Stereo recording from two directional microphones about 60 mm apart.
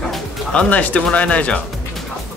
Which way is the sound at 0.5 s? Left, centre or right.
Left.